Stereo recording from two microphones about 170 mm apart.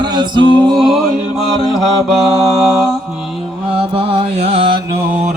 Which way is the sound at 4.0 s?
35° right (ahead or behind).